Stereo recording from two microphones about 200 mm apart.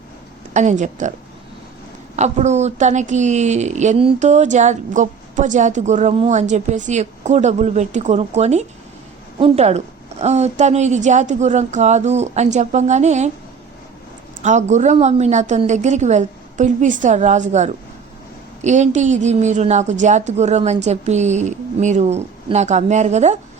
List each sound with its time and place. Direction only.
0.5 s a woman's voice: 35° right (ahead or behind)
2.1 s a woman's voice: 35° right (ahead or behind)
14.4 s a woman's voice: 35° right (ahead or behind)